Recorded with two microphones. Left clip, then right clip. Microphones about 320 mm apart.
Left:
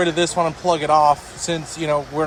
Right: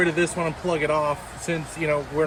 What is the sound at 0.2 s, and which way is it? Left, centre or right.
Speech, centre.